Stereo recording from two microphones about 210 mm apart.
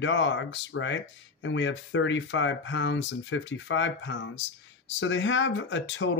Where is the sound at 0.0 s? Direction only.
60° left (ahead or behind).